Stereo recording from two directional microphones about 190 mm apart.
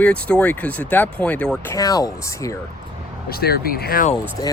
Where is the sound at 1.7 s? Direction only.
20° left (ahead or behind).